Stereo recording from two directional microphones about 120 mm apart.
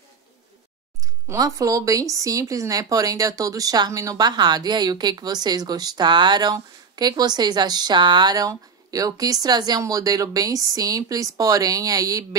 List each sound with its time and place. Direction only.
1.0 s speech: 25° right (ahead or behind)